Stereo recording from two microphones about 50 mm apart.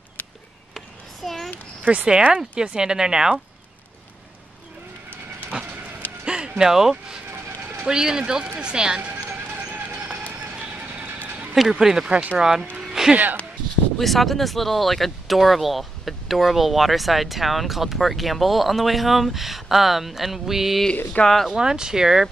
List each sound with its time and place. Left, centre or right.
0.7 s a sound: centre
1.9 s speech: centre
5.5 s train: centre
6.2 s a sound: centre
6.6 s speech: centre
9.3 s vehicle: right
11.8 s speech: centre
12.1 s speech: right
12.4 s speech: centre
13.1 s speech: right
13.9 s speech: centre